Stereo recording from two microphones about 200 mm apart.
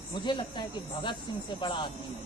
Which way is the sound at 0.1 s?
20° left (ahead or behind).